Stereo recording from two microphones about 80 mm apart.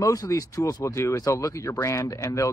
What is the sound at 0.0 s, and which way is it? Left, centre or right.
Speech, left.